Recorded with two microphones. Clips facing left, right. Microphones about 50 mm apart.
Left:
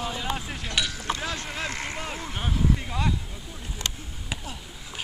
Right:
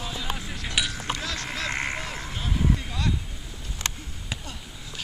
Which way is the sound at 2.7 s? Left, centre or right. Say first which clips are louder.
Left 2 dB; centre.